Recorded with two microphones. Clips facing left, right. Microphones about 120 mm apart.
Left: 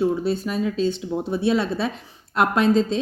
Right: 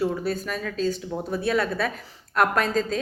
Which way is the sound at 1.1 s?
10° left (ahead or behind).